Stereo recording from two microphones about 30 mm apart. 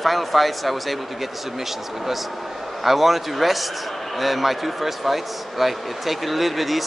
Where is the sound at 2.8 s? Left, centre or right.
Centre.